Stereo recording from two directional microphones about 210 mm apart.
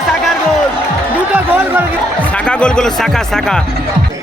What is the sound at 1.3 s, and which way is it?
Speech, 10° right (ahead or behind).